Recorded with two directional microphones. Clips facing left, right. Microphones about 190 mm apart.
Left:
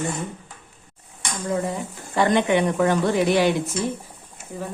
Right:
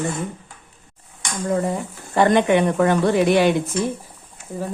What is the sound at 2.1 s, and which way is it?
Speech, 55° right (ahead or behind).